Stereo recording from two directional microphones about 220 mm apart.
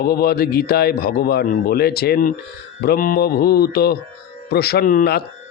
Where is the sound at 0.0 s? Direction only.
45° left (ahead or behind).